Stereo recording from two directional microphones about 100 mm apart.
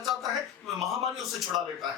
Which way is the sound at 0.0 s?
Centre (ahead or behind).